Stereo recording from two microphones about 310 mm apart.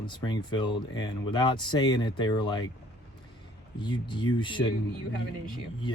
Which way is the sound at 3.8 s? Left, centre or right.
Centre.